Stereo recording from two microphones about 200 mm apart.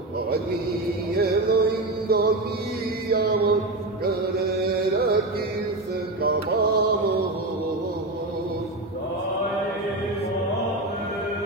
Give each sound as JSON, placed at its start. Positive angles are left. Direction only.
{"t": 1.1, "sound": "music", "side_deg": -50}
{"t": 3.1, "sound": "chant", "side_deg": -50}
{"t": 4.0, "sound": "music", "side_deg": -50}
{"t": 6.2, "sound": "music", "side_deg": -50}